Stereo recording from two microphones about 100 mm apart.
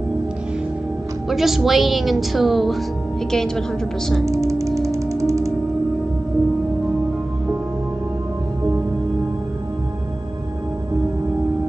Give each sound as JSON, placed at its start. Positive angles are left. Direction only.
{"t": 1.3, "sound": "a woman's voice", "side_deg": -5}
{"t": 4.3, "sound": "music", "side_deg": -30}